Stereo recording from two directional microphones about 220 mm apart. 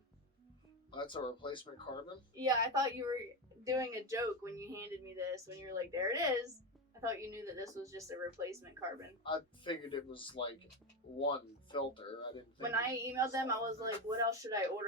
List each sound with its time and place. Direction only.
0.9 s speech: 20° left (ahead or behind)
2.3 s speech: 15° right (ahead or behind)
9.2 s speech: 20° left (ahead or behind)
12.7 s speech: 15° right (ahead or behind)